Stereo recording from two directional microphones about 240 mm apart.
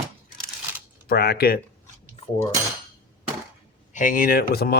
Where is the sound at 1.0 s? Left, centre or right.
Left.